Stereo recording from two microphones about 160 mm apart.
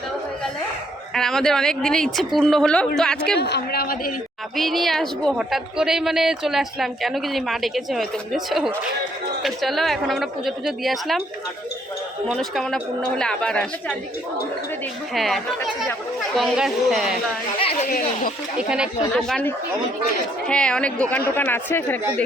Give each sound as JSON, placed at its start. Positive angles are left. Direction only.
{"t": 1.1, "sound": "a woman's voice", "side_deg": 5}
{"t": 3.3, "sound": "a man's voice", "side_deg": 90}
{"t": 4.5, "sound": "a woman's voice", "side_deg": 0}
{"t": 12.3, "sound": "a woman's voice", "side_deg": 0}
{"t": 15.1, "sound": "a woman's voice", "side_deg": 0}
{"t": 17.6, "sound": "a sound", "side_deg": 40}
{"t": 17.8, "sound": "speech", "side_deg": 60}
{"t": 18.7, "sound": "a woman's voice", "side_deg": 0}